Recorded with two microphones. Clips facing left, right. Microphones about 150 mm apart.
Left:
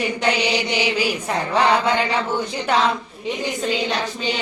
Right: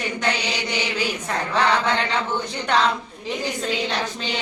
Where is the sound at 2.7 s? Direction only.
5° left (ahead or behind).